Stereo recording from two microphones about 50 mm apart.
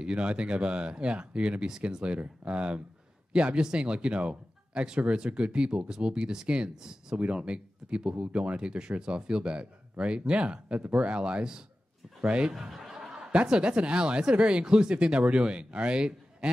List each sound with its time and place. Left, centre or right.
0.0 s speech: right
7.2 s speech: right
12.5 s speech: centre